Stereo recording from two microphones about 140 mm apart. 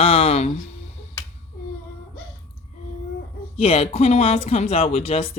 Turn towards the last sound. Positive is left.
turn(degrees=45)  # may be behind; listen again after turning